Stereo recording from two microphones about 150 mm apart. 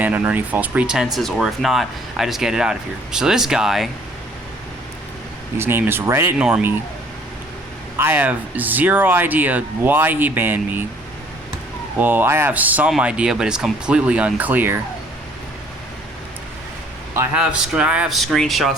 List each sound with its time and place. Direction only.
0.0 s speech: 10° right (ahead or behind)
5.5 s speech: 15° right (ahead or behind)
7.9 s speech: 15° right (ahead or behind)
11.9 s speech: 15° right (ahead or behind)
17.2 s speech: 10° right (ahead or behind)